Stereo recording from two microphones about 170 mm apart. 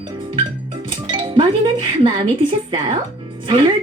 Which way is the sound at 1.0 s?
25° right (ahead or behind).